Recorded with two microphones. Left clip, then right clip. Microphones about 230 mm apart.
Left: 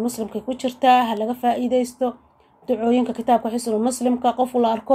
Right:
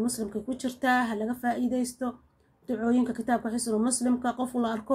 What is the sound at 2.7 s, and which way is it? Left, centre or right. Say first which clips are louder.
Speech: left 6 dB; left.